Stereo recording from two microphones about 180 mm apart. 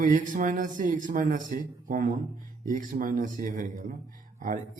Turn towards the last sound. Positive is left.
turn(degrees=-50)  # may be behind; listen again after turning